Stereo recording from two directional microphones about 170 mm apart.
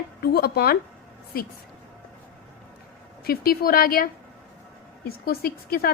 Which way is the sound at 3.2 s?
60° left (ahead or behind).